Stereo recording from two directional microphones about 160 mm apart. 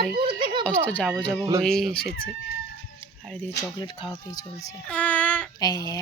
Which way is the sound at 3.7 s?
30° left (ahead or behind).